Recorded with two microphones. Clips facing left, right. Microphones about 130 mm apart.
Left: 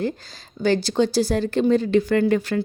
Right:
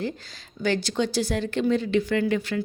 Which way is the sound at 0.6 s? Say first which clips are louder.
Left 5 dB; 35° left (ahead or behind).